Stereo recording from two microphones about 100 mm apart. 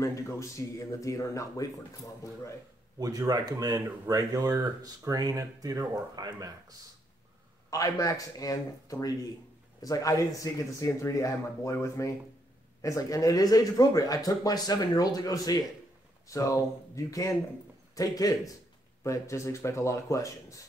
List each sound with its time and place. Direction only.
0.0 s speech: 30° left (ahead or behind)
3.0 s speech: 40° right (ahead or behind)
7.7 s speech: 35° left (ahead or behind)